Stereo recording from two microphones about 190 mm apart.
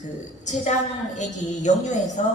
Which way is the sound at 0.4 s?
40° left (ahead or behind).